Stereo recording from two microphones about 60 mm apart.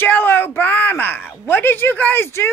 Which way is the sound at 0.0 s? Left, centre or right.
Left.